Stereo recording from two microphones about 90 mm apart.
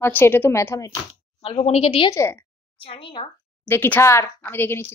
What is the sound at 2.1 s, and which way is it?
Speech, 30° left (ahead or behind).